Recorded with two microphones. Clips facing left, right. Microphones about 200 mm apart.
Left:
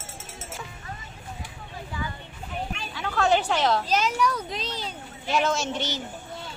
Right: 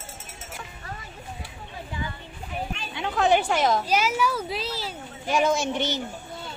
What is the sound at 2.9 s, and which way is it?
Speech, 20° right (ahead or behind).